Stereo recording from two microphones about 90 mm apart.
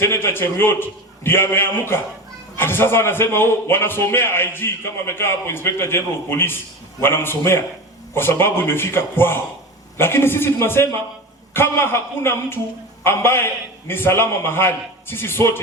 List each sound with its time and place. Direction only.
0.0 s a man's voice: 25° left (ahead or behind)